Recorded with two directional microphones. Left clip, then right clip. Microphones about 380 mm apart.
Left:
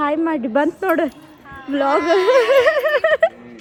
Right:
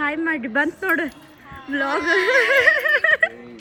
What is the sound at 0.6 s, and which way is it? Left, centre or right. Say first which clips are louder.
Speech: left 2 dB; centre.